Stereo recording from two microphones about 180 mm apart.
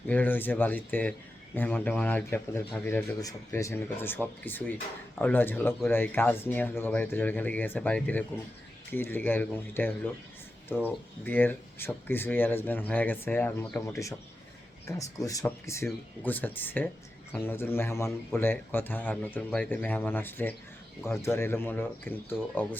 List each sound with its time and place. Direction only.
0.1 s speech: 10° left (ahead or behind)